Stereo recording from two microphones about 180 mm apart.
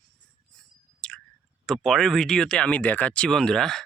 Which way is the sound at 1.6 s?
Centre (ahead or behind).